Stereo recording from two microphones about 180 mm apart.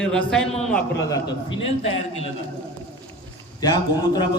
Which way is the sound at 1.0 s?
20° left (ahead or behind).